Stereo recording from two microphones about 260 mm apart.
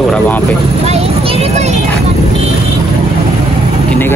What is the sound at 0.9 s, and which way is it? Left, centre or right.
Vehicle, right.